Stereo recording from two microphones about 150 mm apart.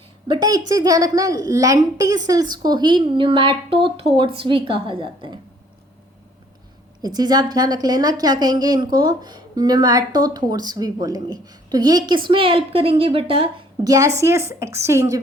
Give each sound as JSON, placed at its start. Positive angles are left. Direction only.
{"t": 0.3, "sound": "speech", "side_deg": -25}
{"t": 7.0, "sound": "speech", "side_deg": -25}
{"t": 13.8, "sound": "speech", "side_deg": -20}